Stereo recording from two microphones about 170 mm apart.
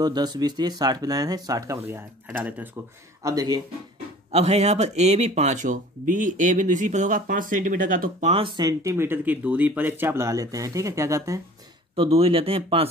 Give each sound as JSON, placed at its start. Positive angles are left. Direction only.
{"t": 0.0, "sound": "speech", "side_deg": -25}
{"t": 4.3, "sound": "speech", "side_deg": -40}
{"t": 8.3, "sound": "speech", "side_deg": -30}
{"t": 11.9, "sound": "speech", "side_deg": -35}